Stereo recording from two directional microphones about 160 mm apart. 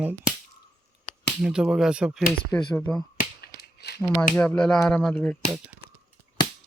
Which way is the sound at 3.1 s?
80° left.